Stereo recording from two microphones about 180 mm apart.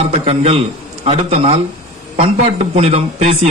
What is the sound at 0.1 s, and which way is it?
A man's voice, 35° right (ahead or behind).